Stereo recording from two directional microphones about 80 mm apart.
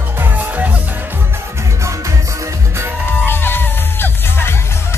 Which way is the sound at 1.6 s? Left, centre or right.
Right.